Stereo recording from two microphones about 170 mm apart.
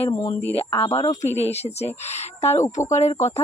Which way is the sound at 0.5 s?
30° left (ahead or behind).